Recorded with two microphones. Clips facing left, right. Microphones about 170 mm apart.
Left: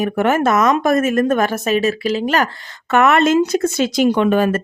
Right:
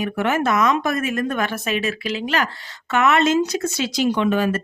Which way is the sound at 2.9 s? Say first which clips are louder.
Left 4 dB; 55° left (ahead or behind).